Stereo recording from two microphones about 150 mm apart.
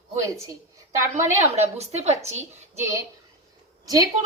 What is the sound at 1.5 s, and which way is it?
Speech, 45° right (ahead or behind).